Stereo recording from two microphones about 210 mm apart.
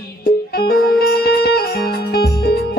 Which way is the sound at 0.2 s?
45° left (ahead or behind).